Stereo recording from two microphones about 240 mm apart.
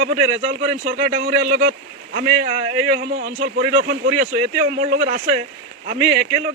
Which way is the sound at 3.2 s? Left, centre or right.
Right.